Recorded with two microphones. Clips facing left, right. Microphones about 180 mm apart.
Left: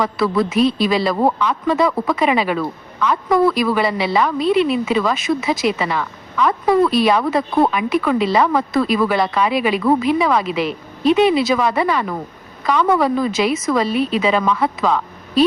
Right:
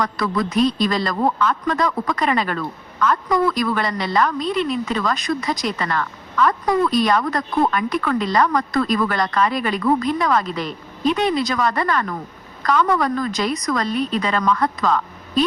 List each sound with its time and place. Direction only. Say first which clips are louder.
0.0 s speech: left 4 dB; 5° left (ahead or behind)
4.4 s a woman's voice: left 6 dB; 65° left (ahead or behind)
4.9 s speech: left 4 dB; 5° left (ahead or behind)